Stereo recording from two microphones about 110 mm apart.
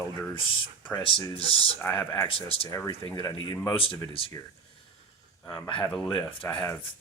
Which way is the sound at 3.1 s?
45° left (ahead or behind).